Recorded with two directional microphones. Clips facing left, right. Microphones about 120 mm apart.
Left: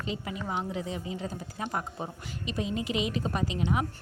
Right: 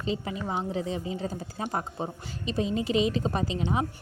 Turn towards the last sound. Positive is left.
turn(degrees=-30)  # may be behind; listen again after turning